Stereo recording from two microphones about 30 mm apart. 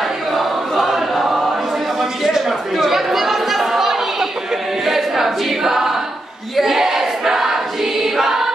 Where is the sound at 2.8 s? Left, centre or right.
Centre.